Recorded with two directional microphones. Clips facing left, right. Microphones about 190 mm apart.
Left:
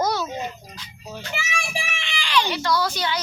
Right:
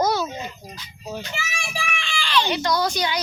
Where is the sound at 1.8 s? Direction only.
25° left (ahead or behind).